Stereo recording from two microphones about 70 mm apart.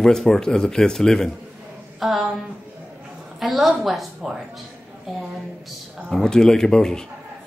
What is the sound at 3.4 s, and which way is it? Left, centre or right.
A woman's voice, centre.